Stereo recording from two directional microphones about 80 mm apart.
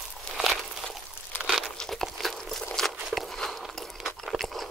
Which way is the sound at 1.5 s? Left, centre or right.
Centre.